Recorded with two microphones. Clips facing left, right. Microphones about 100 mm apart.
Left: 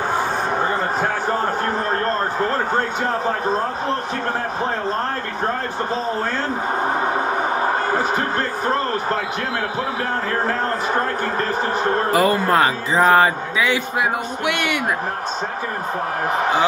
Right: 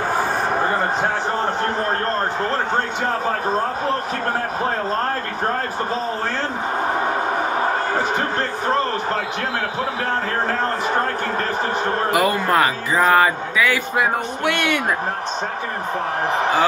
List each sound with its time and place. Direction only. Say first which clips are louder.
12.1 s speech: left 1 dB; 30° left (ahead or behind)
13.9 s speech: right 1 dB; 15° left (ahead or behind)